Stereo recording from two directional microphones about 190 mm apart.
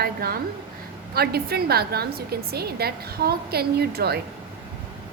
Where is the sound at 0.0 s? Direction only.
55° right (ahead or behind).